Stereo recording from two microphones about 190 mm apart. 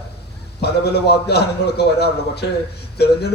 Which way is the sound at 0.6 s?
60° left (ahead or behind).